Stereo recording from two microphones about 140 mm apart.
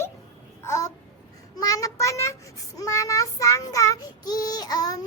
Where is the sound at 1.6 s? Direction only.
25° left (ahead or behind).